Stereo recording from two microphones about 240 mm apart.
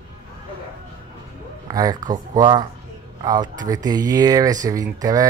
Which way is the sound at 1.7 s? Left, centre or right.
Centre.